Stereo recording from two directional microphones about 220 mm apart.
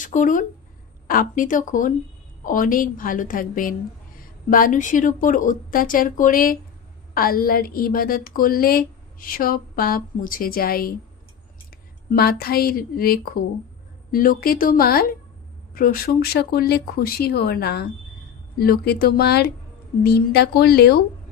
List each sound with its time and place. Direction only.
0.0 s a woman's voice: 35° left (ahead or behind)
12.1 s a woman's voice: 45° left (ahead or behind)